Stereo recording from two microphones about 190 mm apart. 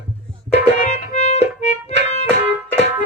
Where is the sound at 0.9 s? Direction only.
35° left (ahead or behind).